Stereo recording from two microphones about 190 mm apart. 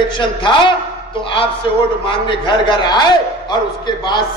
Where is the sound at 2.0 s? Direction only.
25° left (ahead or behind).